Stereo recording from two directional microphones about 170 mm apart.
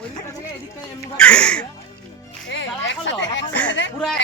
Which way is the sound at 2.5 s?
90° left.